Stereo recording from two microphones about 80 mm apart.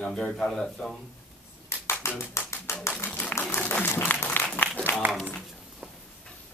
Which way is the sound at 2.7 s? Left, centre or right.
Left.